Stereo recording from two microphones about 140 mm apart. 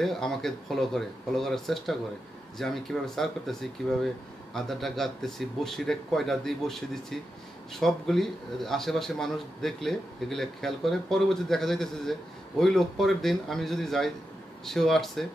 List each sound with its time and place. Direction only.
0.0 s speech: 5° left (ahead or behind)